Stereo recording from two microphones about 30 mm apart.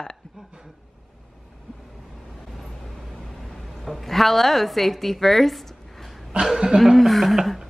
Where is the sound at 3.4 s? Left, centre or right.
Centre.